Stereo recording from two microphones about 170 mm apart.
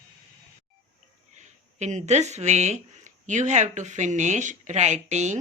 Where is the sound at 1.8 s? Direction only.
45° right (ahead or behind).